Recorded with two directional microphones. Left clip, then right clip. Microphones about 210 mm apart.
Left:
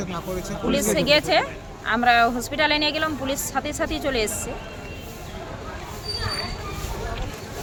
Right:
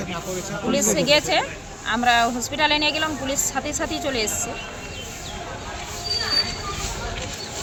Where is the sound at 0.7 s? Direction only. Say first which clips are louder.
Right 1 dB; 20° left (ahead or behind).